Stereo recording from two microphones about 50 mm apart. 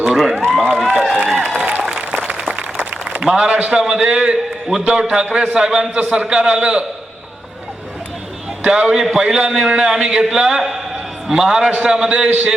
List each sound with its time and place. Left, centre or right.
0.0 s run: centre
0.5 s a sound: centre
1.5 s applause: right
3.2 s a man's voice: centre
8.6 s a man's voice: centre
9.2 s a man's voice: right